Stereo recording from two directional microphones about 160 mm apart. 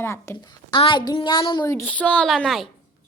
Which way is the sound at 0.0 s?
15° left (ahead or behind).